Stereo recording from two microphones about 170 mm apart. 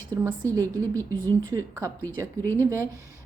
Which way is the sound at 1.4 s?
20° right (ahead or behind).